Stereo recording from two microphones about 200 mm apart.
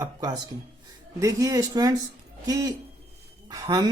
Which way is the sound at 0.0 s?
20° right (ahead or behind).